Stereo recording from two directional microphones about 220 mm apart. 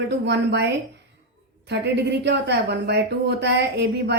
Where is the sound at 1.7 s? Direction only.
50° right (ahead or behind).